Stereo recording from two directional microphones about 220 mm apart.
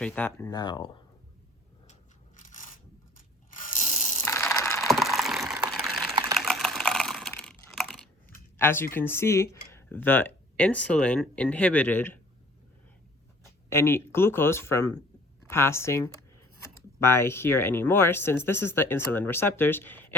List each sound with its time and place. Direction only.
0.0 s speech: 10° left (ahead or behind)
1.9 s crushing: 35° left (ahead or behind)
3.5 s ratchet: 35° left (ahead or behind)
4.3 s mechanisms: 15° left (ahead or behind)
4.8 s a sound: centre (ahead or behind)
6.3 s computer keyboard: centre (ahead or behind)
8.5 s speech: 10° left (ahead or behind)
13.7 s speech: 10° left (ahead or behind)